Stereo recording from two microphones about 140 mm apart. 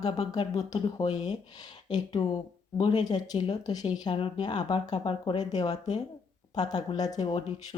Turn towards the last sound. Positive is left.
turn(degrees=30)  # may be behind; listen again after turning